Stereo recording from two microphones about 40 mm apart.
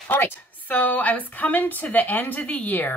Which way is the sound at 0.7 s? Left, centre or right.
Left.